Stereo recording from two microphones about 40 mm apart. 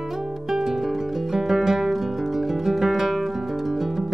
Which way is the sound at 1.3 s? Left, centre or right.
Centre.